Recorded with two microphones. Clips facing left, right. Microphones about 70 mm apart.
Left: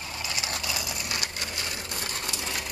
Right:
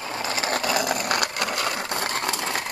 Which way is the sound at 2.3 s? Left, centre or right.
Right.